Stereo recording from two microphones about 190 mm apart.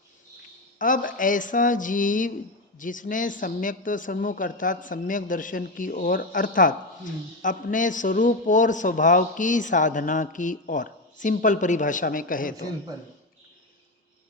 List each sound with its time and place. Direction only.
0.8 s speech: 45° left (ahead or behind)